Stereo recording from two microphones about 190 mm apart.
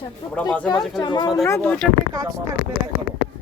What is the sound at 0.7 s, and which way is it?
Speech, 20° left (ahead or behind).